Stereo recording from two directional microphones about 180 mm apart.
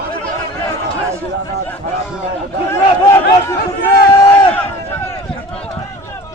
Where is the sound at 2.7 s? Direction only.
15° left (ahead or behind).